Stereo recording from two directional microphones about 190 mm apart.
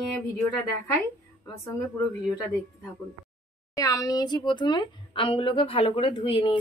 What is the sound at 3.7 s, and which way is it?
A woman's voice, 15° left (ahead or behind).